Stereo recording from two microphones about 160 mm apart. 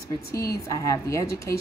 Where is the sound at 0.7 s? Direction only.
20° left (ahead or behind).